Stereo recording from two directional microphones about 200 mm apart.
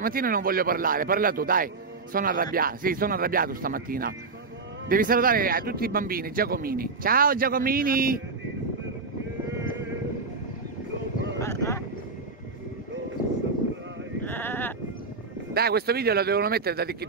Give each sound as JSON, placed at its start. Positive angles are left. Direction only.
{"t": 0.0, "sound": "a man's voice", "side_deg": -45}
{"t": 11.3, "sound": "a sound", "side_deg": 15}
{"t": 14.2, "sound": "sheep", "side_deg": 10}
{"t": 15.5, "sound": "a man's voice", "side_deg": -50}